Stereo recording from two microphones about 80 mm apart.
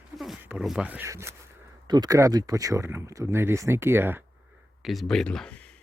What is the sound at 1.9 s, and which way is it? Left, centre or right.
Speech, right.